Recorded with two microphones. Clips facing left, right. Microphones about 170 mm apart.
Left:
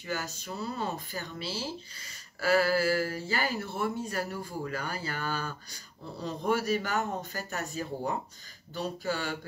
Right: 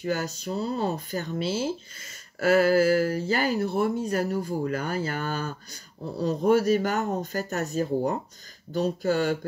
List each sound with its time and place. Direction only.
0.0 s speech: 40° right (ahead or behind)